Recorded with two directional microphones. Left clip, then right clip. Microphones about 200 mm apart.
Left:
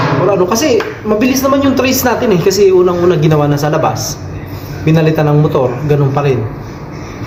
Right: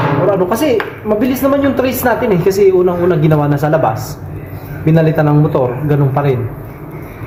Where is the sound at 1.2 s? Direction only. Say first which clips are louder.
Left 2 dB; 15° right (ahead or behind).